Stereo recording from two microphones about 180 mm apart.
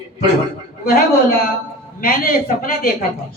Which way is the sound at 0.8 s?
55° left (ahead or behind).